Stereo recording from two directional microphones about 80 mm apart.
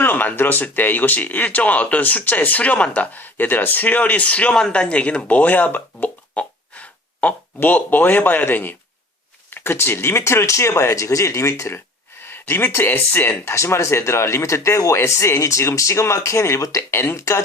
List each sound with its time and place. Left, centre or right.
0.0 s speech: left
12.2 s speech: left